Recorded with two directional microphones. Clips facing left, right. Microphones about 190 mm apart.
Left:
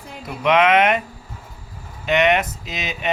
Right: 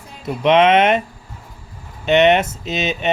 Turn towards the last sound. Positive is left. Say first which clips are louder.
# right 8 dB
turn(degrees=-25)  # may be behind; listen again after turning